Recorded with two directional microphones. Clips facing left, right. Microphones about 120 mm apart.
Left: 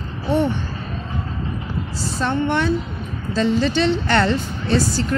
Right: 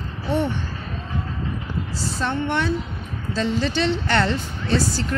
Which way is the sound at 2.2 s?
45° left (ahead or behind).